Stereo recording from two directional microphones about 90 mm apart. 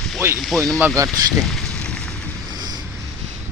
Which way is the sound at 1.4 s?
5° left (ahead or behind).